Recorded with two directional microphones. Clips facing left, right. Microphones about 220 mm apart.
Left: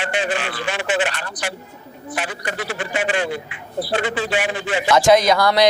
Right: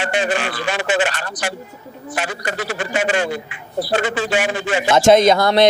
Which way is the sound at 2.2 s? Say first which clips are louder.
Right 3 dB; 45° right (ahead or behind).